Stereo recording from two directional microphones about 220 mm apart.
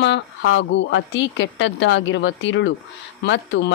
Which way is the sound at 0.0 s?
55° left (ahead or behind).